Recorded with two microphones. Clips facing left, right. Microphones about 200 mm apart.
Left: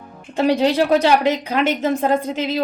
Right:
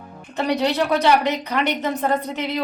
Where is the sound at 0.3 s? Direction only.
30° left (ahead or behind).